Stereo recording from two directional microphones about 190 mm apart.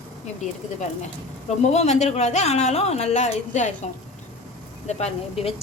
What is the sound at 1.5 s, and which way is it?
A woman's voice, 35° left (ahead or behind).